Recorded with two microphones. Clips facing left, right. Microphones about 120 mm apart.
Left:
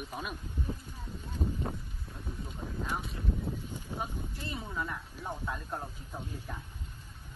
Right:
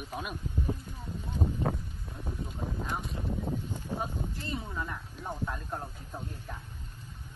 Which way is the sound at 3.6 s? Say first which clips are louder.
Right 3 dB; 15° right (ahead or behind).